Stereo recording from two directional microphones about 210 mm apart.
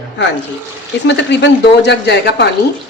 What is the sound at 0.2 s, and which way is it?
Speech, 55° left (ahead or behind).